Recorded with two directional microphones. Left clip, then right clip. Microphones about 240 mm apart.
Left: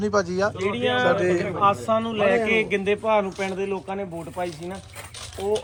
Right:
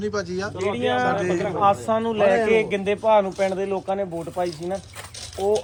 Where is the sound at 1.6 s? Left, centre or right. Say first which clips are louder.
Right 2 dB; right.